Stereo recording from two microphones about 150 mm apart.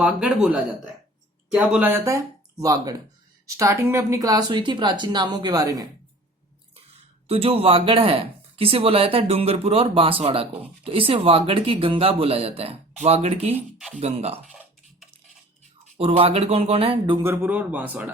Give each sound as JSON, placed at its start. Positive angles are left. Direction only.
{"t": 0.0, "sound": "a man's voice", "side_deg": -5}
{"t": 7.3, "sound": "speech", "side_deg": -40}
{"t": 16.0, "sound": "speech", "side_deg": -40}
{"t": 17.2, "sound": "speech", "side_deg": -15}